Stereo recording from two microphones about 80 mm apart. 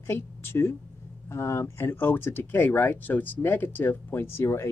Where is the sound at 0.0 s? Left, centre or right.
Left.